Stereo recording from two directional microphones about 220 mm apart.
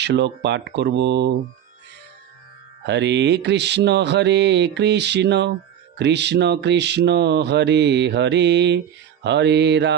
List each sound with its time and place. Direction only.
0.0 s mantra: 50° right (ahead or behind)
2.8 s mantra: 50° right (ahead or behind)